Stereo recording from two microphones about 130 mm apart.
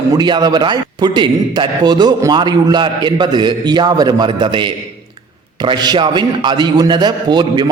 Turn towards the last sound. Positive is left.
turn(degrees=-35)  # may be behind; listen again after turning